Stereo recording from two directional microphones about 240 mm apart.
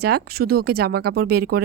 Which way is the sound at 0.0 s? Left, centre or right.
Right.